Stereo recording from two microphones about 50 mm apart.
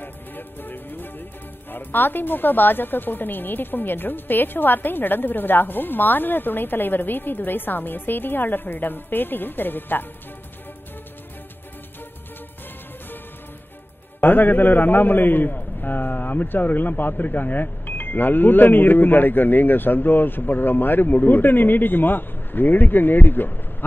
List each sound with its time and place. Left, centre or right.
0.0 s music: left
1.7 s a man's voice: left
14.2 s a man's voice: left